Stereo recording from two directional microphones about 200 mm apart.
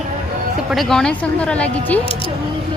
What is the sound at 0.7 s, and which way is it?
Speech, centre (ahead or behind).